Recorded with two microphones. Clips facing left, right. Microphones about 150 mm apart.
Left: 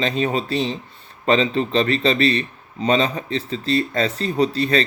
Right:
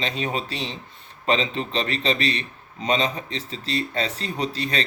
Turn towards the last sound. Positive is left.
turn(degrees=35)  # may be behind; listen again after turning